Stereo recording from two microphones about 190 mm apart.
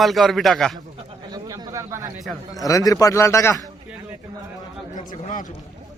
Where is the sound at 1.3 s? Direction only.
20° right (ahead or behind).